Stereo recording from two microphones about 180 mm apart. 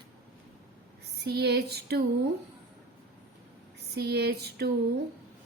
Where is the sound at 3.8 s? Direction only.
65° right (ahead or behind).